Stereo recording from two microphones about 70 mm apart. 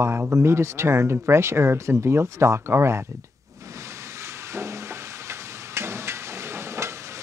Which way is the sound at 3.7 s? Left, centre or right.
Right.